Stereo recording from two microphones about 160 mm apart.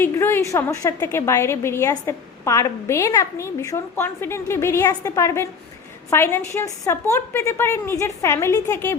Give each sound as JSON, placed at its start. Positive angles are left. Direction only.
{"t": 0.0, "sound": "a woman's voice", "side_deg": 15}